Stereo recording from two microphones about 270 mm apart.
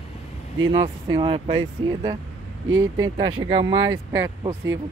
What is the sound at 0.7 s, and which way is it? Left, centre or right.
Speech, centre.